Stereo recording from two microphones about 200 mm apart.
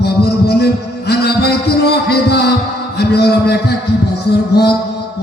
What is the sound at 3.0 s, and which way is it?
Speech, 55° left (ahead or behind).